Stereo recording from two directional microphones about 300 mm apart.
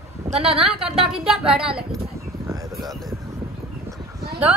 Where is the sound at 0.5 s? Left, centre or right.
Centre.